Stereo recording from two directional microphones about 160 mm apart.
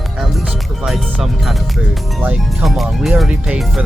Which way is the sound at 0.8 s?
Centre (ahead or behind).